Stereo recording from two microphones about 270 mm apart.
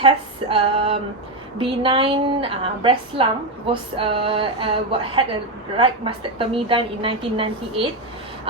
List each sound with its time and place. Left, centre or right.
0.0 s speech: centre